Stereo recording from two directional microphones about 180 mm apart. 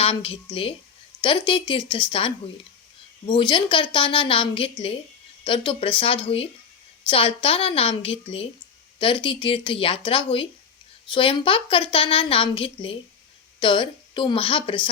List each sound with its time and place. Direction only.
0.0 s a woman's voice: 30° left (ahead or behind)